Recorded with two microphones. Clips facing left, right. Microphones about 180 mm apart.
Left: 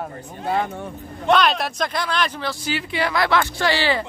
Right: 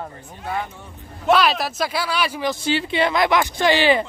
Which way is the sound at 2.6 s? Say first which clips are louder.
Right 4 dB; 25° right (ahead or behind).